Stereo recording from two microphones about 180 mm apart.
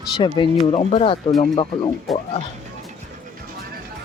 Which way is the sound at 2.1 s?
Centre (ahead or behind).